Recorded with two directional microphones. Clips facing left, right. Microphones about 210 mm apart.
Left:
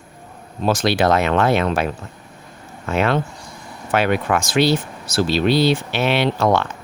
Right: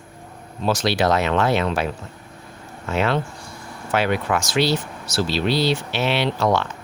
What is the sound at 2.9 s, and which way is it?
Speech, 55° left (ahead or behind).